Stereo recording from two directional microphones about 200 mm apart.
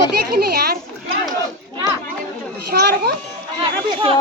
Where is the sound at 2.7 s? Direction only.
50° right (ahead or behind).